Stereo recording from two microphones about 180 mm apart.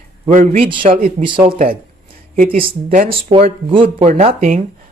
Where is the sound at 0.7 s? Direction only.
25° right (ahead or behind).